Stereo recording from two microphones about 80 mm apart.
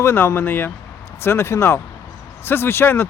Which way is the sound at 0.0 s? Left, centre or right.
Left.